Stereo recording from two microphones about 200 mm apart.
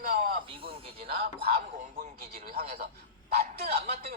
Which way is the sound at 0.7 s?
30° right (ahead or behind).